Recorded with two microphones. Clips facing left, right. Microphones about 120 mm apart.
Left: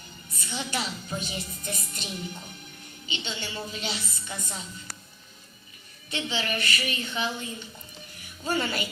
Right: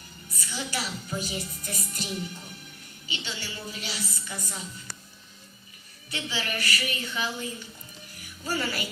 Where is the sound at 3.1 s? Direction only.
25° left (ahead or behind).